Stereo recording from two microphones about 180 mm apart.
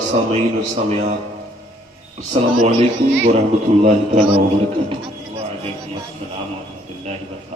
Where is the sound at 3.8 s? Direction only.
40° right (ahead or behind).